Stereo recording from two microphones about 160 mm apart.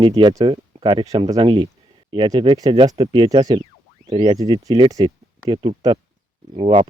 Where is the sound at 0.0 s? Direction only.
30° right (ahead or behind).